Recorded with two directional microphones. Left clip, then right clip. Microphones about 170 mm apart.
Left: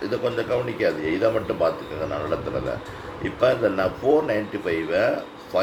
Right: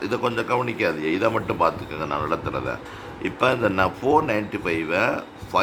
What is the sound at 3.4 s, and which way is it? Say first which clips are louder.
Speech: even; 35° right (ahead or behind).